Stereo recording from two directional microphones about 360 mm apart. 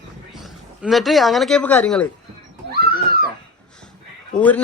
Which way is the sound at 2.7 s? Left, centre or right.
Right.